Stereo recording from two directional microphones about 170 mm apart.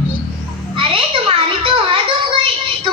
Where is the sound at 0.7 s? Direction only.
30° right (ahead or behind).